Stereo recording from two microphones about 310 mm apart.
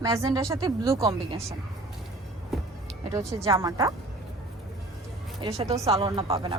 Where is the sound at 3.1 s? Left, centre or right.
Centre.